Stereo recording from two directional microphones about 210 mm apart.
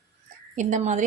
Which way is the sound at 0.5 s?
35° right (ahead or behind).